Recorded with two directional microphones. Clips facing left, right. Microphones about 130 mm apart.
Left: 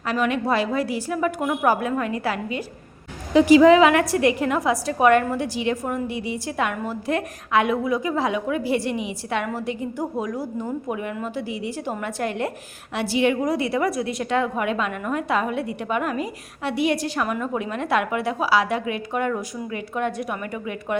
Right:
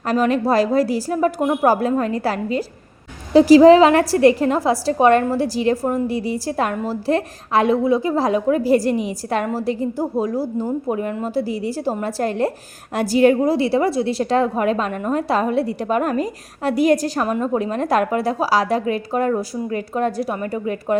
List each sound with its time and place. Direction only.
0.1 s a woman's voice: 35° right (ahead or behind)